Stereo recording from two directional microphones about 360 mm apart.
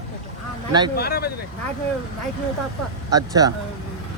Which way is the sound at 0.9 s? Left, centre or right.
Left.